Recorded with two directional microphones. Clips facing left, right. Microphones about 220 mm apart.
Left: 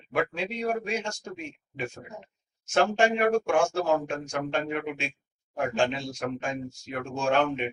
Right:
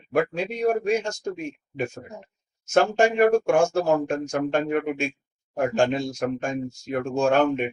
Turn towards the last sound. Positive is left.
turn(degrees=-45)  # may be behind; listen again after turning